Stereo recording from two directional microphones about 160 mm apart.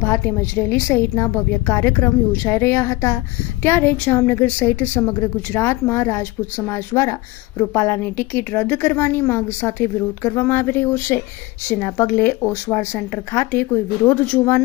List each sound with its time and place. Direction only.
0.0 s a woman's voice: 15° left (ahead or behind)